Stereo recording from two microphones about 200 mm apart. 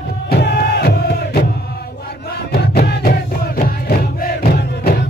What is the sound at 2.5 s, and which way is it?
Crowd, 55° left (ahead or behind).